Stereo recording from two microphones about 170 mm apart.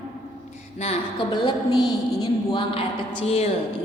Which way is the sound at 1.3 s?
25° left (ahead or behind).